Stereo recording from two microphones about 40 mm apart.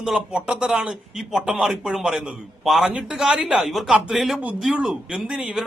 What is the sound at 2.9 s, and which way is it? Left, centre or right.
Speech, right.